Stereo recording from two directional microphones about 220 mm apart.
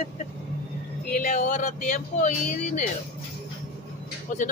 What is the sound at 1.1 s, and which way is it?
Speech, 35° left (ahead or behind).